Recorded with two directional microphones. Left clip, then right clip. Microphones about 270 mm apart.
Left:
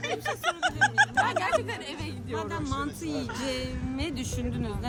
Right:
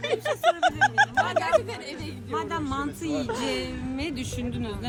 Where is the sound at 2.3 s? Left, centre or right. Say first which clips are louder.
Right 4 dB; centre.